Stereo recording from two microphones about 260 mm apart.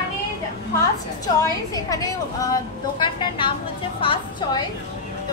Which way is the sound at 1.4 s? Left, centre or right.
Centre.